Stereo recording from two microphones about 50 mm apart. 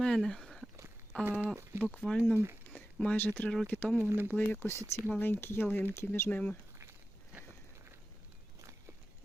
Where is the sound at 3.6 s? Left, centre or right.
Left.